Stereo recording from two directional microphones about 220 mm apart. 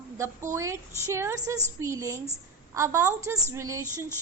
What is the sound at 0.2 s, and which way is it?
A woman's voice, 15° right (ahead or behind).